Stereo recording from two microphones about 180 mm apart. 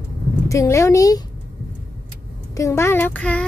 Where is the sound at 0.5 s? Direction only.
15° left (ahead or behind).